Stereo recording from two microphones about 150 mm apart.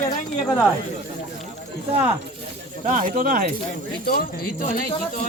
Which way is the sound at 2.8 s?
60° right (ahead or behind).